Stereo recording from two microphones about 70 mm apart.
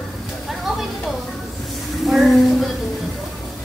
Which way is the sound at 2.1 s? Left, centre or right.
Centre.